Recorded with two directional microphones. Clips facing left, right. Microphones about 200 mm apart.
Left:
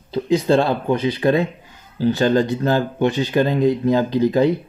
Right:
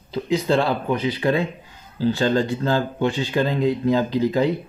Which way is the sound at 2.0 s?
20° left (ahead or behind).